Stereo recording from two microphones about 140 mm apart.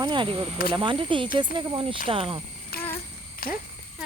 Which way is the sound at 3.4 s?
90° left.